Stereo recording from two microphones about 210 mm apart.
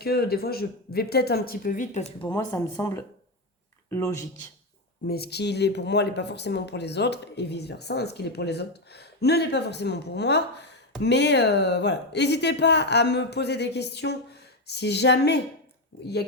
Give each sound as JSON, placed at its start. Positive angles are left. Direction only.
{"t": 0.0, "sound": "speech", "side_deg": 50}
{"t": 2.3, "sound": "speech", "side_deg": 15}
{"t": 5.0, "sound": "speech", "side_deg": 50}